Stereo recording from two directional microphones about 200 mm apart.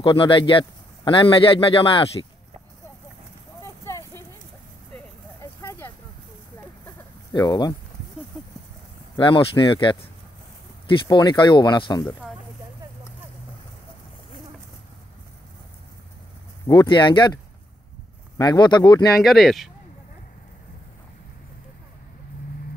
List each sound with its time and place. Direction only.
0.0 s a man's voice: 25° left (ahead or behind)
3.6 s a sound: 15° left (ahead or behind)
5.4 s vehicle: 15° left (ahead or behind)
7.3 s a man's voice: 20° left (ahead or behind)
9.1 s a man's voice: 25° left (ahead or behind)
11.1 s a man's voice: 20° left (ahead or behind)
16.6 s a man's voice: 20° left (ahead or behind)
18.4 s a man's voice: 20° left (ahead or behind)
19.2 s speech: centre (ahead or behind)